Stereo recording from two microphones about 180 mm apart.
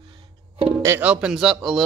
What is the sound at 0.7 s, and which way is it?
Speech, 10° right (ahead or behind).